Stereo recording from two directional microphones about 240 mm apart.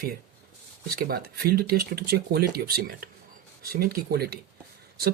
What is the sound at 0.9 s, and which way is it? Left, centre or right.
Speech, right.